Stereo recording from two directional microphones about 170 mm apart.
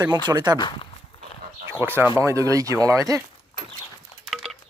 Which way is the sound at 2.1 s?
15° right (ahead or behind).